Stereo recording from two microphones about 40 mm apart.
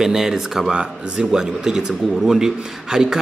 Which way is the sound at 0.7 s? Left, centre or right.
Right.